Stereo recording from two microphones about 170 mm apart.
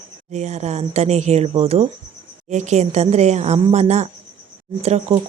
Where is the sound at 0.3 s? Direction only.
45° right (ahead or behind).